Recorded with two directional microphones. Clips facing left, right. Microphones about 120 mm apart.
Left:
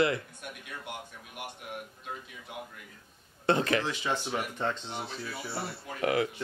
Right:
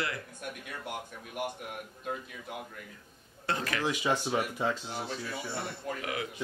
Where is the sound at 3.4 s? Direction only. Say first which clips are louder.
Left 7 dB; 25° left (ahead or behind).